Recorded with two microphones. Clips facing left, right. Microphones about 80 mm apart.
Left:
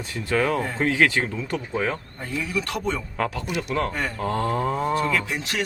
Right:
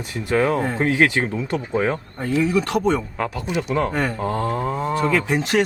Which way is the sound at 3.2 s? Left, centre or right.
Centre.